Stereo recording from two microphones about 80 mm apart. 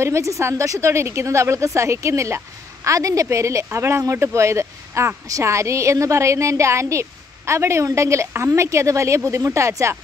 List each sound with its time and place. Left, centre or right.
0.0 s a woman's voice: right